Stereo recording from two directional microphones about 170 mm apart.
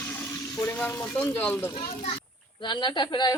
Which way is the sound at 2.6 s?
25° left (ahead or behind).